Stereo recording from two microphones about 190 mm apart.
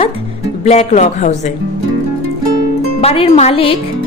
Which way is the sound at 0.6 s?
35° left (ahead or behind).